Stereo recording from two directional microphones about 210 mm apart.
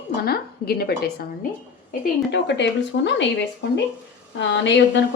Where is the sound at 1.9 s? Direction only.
55° left (ahead or behind).